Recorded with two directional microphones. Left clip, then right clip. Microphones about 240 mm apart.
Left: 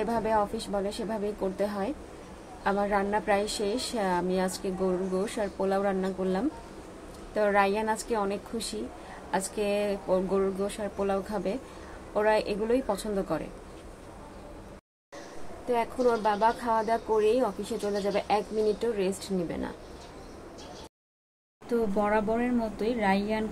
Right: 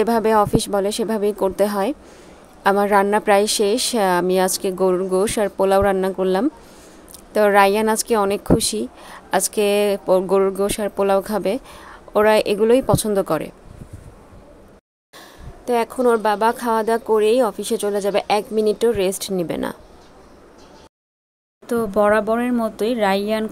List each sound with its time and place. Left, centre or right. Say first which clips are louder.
0.0 s speech: right 11 dB; right
15.6 s speech: right 8 dB; right
21.6 s speech: right 10 dB; right